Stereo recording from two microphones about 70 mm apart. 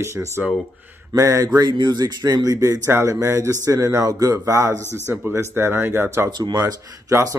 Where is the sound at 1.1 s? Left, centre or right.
Right.